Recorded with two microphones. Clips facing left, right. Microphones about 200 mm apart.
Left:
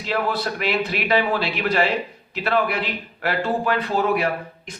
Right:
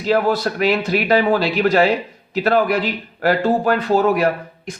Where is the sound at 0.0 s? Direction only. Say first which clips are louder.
Right 7 dB; 45° right (ahead or behind).